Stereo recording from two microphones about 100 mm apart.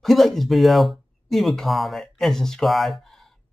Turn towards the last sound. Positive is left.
turn(degrees=0)  # may be behind; listen again after turning